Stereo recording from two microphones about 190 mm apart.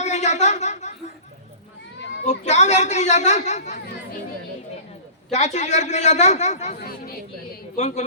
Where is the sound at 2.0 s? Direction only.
65° left (ahead or behind).